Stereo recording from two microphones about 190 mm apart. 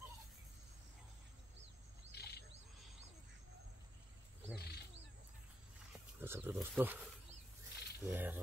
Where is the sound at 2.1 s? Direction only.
60° left (ahead or behind).